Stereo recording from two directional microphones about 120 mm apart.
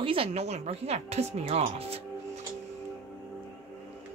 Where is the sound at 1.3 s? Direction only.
55° right (ahead or behind).